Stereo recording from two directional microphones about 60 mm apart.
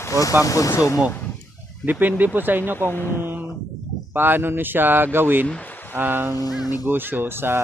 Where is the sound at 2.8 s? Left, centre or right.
Left.